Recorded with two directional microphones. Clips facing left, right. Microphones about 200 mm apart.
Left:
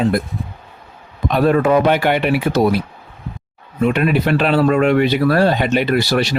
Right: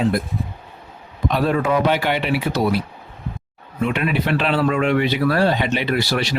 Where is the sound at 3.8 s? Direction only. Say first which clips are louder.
Left 5 dB; 45° left (ahead or behind).